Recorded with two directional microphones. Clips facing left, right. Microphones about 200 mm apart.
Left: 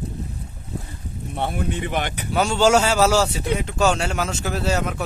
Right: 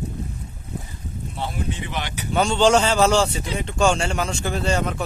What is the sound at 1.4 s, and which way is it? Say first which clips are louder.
Speech: left 4 dB; 60° left (ahead or behind).